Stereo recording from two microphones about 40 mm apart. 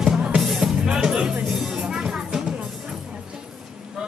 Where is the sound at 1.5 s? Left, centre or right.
Centre.